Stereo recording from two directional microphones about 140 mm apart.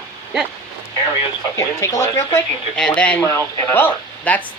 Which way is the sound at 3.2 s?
20° left (ahead or behind).